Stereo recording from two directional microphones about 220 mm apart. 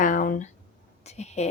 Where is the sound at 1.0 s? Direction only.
30° left (ahead or behind).